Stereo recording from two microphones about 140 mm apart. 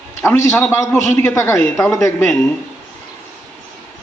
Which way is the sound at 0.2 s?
20° left (ahead or behind).